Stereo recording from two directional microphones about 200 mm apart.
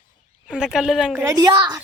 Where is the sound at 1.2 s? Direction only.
15° right (ahead or behind).